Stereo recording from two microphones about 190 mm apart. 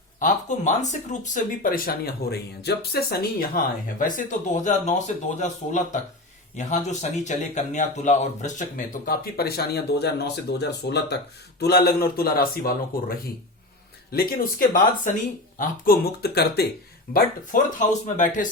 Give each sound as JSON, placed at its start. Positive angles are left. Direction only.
{"t": 0.2, "sound": "speech", "side_deg": 40}